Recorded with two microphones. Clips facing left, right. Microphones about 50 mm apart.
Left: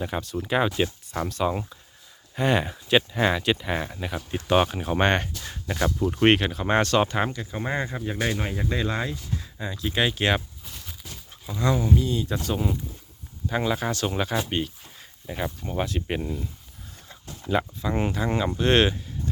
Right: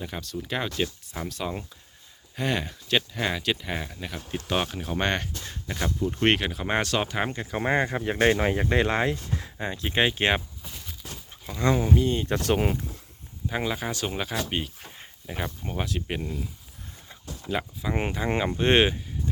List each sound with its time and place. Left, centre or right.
0.0 s speech: centre
1.2 s speech: centre; by 5.3 s left
6.2 s speech: centre
7.4 s speech: right
8.4 s speech: right
9.6 s speech: right
10.0 s speech: right
10.7 s horse: centre
11.6 s speech: right
12.4 s speech: right
13.5 s speech: centre
15.3 s speech: centre
15.7 s speech: centre
17.9 s speech: right